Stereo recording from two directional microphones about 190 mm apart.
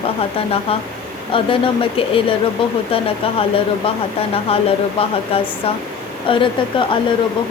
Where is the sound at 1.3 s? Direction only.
30° left (ahead or behind).